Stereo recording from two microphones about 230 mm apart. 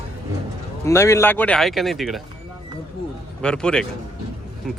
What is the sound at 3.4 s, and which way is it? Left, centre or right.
Speech, centre.